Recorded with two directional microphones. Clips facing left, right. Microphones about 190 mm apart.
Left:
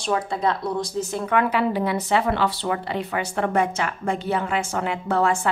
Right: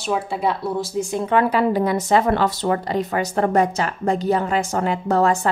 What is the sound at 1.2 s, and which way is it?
Speech, 35° right (ahead or behind).